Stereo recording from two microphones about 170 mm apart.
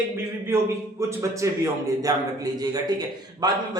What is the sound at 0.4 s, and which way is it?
A man's voice, 15° right (ahead or behind).